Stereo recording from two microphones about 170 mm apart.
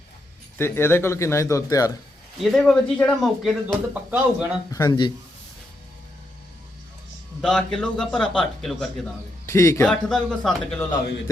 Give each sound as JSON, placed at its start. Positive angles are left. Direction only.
{"t": 0.6, "sound": "speech", "side_deg": 15}
{"t": 2.4, "sound": "speech", "side_deg": 0}
{"t": 4.7, "sound": "speech", "side_deg": 20}
{"t": 7.4, "sound": "speech", "side_deg": 5}
{"t": 9.5, "sound": "speech", "side_deg": 15}
{"t": 9.8, "sound": "speech", "side_deg": 5}